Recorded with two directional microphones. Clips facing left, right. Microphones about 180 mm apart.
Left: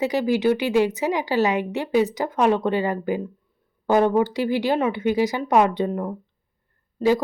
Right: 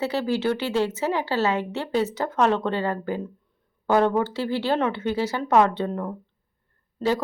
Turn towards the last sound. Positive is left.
turn(degrees=15)  # may be behind; listen again after turning